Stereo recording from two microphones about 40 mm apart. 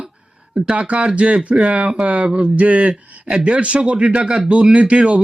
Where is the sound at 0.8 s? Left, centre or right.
Right.